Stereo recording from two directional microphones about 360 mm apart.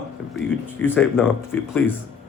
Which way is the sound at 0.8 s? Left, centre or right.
Centre.